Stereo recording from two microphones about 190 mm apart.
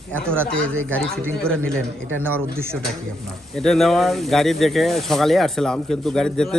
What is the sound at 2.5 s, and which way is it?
Speech, 10° right (ahead or behind).